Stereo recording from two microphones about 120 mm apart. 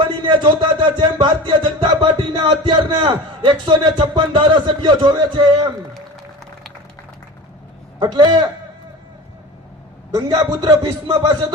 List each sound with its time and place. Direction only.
0.2 s music: 40° right (ahead or behind)
7.9 s a man's voice: 35° right (ahead or behind)
10.1 s a man's voice: 35° right (ahead or behind)